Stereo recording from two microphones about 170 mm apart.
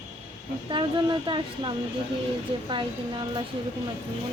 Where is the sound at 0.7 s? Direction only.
30° right (ahead or behind).